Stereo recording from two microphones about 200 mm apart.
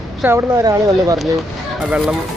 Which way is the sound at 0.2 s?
10° right (ahead or behind).